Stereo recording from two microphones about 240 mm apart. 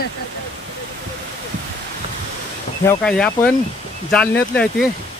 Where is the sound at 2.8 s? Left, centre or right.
Centre.